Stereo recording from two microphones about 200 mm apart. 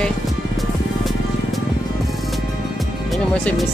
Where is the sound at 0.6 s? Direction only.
Centre (ahead or behind).